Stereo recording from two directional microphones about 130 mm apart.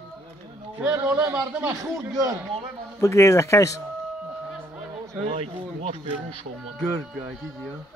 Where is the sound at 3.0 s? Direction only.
20° left (ahead or behind).